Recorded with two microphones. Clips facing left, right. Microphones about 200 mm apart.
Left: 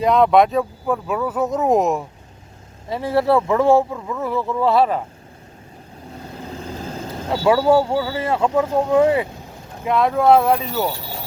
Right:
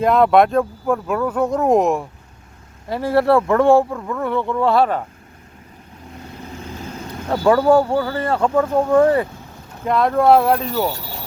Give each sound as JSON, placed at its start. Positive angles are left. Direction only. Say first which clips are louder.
{"t": 0.0, "sound": "speech", "louder": "right 1 dB", "side_deg": 0}
{"t": 6.7, "sound": "vehicle", "louder": "left 1 dB", "side_deg": 30}
{"t": 7.4, "sound": "speech", "louder": "right 1 dB", "side_deg": 5}